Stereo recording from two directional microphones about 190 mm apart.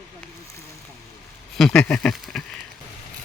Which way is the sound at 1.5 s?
Centre (ahead or behind).